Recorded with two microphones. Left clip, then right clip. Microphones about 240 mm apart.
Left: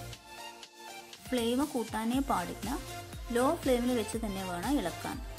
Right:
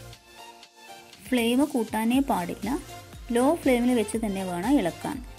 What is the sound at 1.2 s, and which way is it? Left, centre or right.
Speech, centre.